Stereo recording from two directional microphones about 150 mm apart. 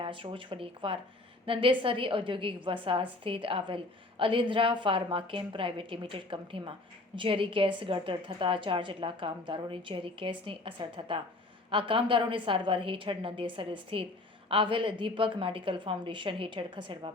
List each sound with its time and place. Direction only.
0.0 s a woman's voice: 35° right (ahead or behind)